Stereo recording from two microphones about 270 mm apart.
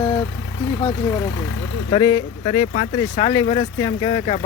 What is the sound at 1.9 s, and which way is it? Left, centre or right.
Speech, centre.